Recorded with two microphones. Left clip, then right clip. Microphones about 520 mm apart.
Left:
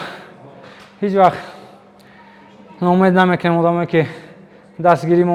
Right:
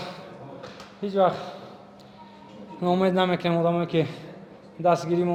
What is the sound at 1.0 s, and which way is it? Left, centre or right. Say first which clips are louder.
Speech: left 9 dB; left.